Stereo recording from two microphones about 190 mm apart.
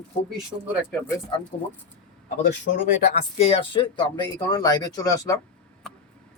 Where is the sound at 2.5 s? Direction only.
70° left (ahead or behind).